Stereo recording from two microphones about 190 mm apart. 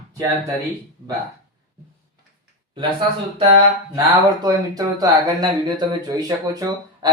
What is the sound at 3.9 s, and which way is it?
Speech, 20° right (ahead or behind).